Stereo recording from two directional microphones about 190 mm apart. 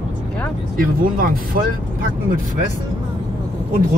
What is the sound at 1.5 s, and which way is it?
Speech, 50° right (ahead or behind).